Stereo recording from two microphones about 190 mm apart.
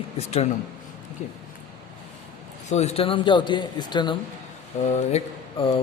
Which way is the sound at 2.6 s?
35° left (ahead or behind).